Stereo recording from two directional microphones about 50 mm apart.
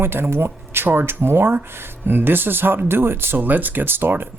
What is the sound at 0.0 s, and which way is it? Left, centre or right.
Speech, right.